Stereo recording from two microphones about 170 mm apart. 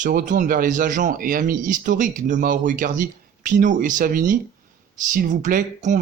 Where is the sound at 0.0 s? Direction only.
50° right (ahead or behind).